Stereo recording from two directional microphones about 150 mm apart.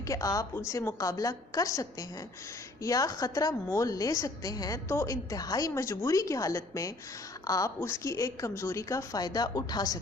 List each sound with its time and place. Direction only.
0.1 s a woman's voice: 20° left (ahead or behind)